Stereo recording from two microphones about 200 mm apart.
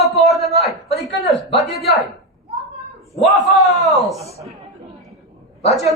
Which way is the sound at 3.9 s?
Centre (ahead or behind).